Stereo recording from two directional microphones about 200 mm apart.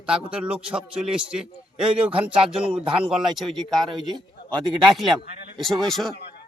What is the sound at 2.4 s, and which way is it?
Speech, 25° right (ahead or behind).